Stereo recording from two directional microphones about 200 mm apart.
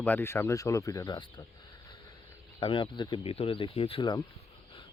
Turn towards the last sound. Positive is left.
turn(degrees=25)  # may be behind; listen again after turning